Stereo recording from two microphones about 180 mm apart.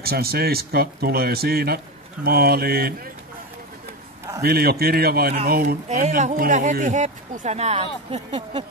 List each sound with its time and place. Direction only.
0.0 s speech: 60° right (ahead or behind)
4.4 s speech: 60° right (ahead or behind)
5.9 s speech: 40° right (ahead or behind)